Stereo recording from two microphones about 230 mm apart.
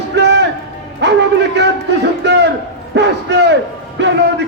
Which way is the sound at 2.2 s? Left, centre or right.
Right.